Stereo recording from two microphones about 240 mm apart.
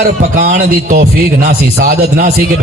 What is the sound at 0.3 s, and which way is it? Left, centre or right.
A man's voice, right.